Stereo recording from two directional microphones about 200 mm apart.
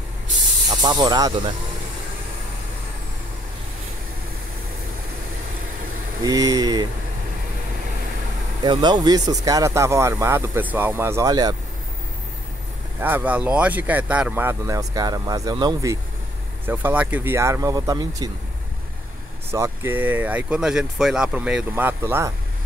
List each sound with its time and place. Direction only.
0.7 s speech: 20° right (ahead or behind)
6.2 s speech: 20° right (ahead or behind)
8.6 s speech: 20° right (ahead or behind)
13.0 s speech: 10° right (ahead or behind)
19.5 s speech: 15° right (ahead or behind)